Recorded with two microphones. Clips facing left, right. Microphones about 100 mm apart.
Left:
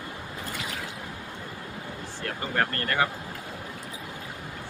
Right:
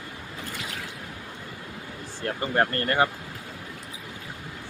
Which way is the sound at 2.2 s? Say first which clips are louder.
Right 4 dB; 30° right (ahead or behind).